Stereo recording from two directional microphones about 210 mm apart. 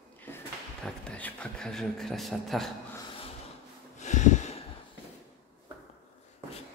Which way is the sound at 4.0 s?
35° left (ahead or behind).